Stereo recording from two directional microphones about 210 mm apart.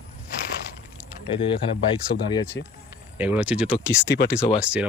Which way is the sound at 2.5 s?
60° left (ahead or behind).